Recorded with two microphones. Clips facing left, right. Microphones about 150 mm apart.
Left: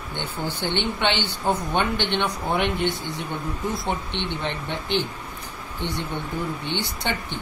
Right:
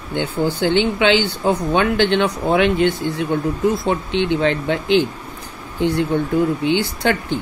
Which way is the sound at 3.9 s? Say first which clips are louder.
Right 9 dB; 90° right.